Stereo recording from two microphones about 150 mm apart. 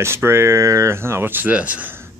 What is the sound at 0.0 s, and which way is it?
Speech, 15° right (ahead or behind).